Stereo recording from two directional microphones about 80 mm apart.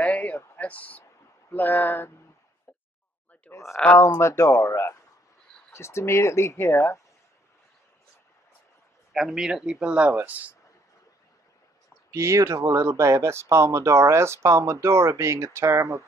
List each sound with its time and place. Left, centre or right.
0.0 s a sound: left
1.5 s speech: left
3.5 s a sound: left
4.2 s speech: left
9.1 s speech: centre
12.1 s speech: right